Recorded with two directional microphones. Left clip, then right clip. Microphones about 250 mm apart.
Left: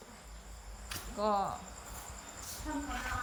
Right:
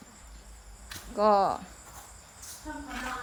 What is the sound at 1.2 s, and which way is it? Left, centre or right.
Speech, centre.